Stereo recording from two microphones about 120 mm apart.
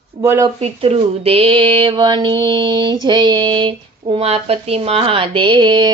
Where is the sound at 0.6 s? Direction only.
60° right (ahead or behind).